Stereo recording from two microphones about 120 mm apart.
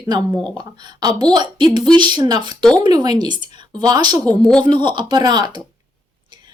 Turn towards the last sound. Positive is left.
turn(degrees=-35)  # may be behind; listen again after turning